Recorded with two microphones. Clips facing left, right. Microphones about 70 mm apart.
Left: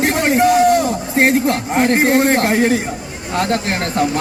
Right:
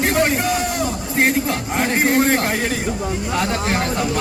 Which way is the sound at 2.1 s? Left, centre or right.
Left.